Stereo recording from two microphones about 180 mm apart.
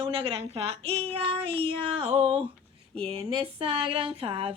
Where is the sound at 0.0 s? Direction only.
30° right (ahead or behind).